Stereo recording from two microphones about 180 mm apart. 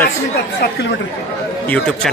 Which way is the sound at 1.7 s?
5° left (ahead or behind).